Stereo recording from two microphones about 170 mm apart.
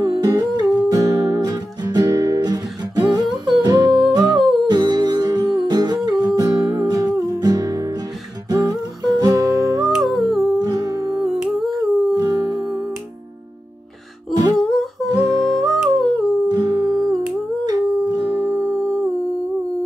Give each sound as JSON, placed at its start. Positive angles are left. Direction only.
{"t": 0.0, "sound": "music", "side_deg": -20}
{"t": 3.4, "sound": "humming", "side_deg": -25}
{"t": 4.6, "sound": "music", "side_deg": -25}
{"t": 9.8, "sound": "humming", "side_deg": 0}
{"t": 10.6, "sound": "music", "side_deg": -20}
{"t": 11.2, "sound": "humming", "side_deg": 0}
{"t": 11.8, "sound": "music", "side_deg": 0}
{"t": 12.1, "sound": "music", "side_deg": -20}
{"t": 14.7, "sound": "humming", "side_deg": 0}
{"t": 15.1, "sound": "music", "side_deg": -20}
{"t": 15.6, "sound": "humming", "side_deg": 0}
{"t": 16.4, "sound": "music", "side_deg": -25}
{"t": 18.7, "sound": "humming", "side_deg": 0}